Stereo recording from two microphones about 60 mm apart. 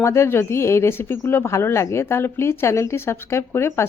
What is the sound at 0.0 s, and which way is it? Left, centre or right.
A woman's voice, left.